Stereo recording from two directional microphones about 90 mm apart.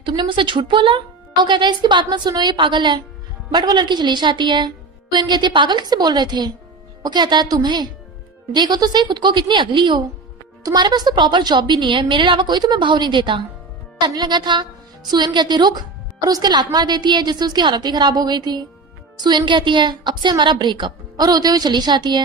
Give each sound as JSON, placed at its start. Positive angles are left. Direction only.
{"t": 0.0, "sound": "a woman's voice", "side_deg": -60}
{"t": 2.6, "sound": "a woman's voice", "side_deg": -60}
{"t": 10.6, "sound": "a woman's voice", "side_deg": -50}